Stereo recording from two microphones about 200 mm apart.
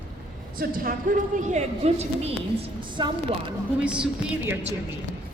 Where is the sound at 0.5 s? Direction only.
45° right (ahead or behind).